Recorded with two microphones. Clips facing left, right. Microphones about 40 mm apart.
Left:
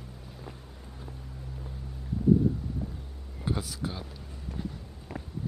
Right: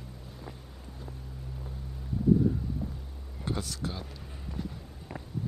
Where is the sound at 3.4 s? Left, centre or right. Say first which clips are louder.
Left 1 dB; centre.